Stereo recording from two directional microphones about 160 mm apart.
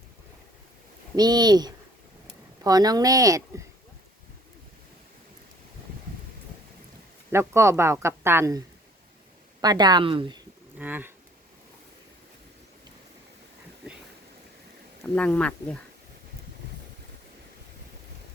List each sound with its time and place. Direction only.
1.1 s speech: 25° right (ahead or behind)
7.3 s speech: 15° right (ahead or behind)
10.8 s speech: 10° right (ahead or behind)
15.0 s speech: 10° left (ahead or behind)